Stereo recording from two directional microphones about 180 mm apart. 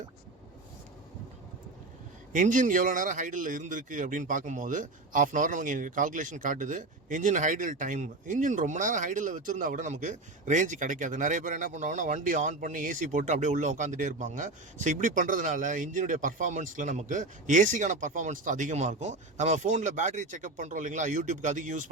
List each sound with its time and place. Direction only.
2.3 s a man's voice: 45° right (ahead or behind)